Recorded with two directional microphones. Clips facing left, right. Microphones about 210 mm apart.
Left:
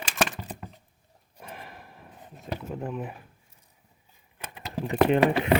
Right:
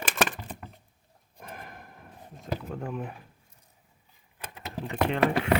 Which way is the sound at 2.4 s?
5° left (ahead or behind).